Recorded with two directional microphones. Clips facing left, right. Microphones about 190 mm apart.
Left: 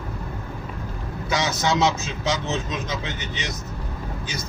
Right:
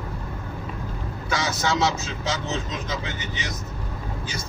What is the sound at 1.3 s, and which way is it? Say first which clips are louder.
Speech: left 2 dB; 20° left (ahead or behind).